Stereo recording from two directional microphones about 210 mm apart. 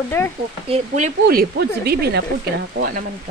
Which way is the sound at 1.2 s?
50° right (ahead or behind).